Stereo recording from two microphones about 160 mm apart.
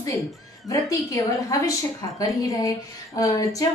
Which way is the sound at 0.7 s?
20° left (ahead or behind).